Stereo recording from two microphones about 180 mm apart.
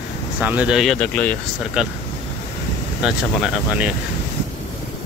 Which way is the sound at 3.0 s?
5° right (ahead or behind).